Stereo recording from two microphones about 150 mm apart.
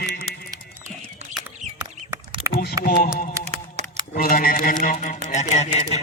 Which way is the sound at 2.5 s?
90° left.